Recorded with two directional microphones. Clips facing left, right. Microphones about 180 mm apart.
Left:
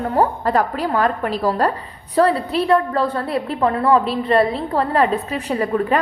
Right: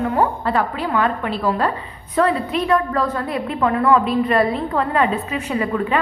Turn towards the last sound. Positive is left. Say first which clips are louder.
# left 2 dB
turn(degrees=40)  # may be behind; listen again after turning